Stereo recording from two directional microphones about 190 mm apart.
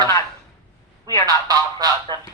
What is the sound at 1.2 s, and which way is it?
Speech, 20° right (ahead or behind).